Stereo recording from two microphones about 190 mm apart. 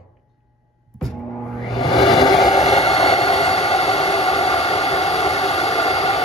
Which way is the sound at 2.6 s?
35° left (ahead or behind).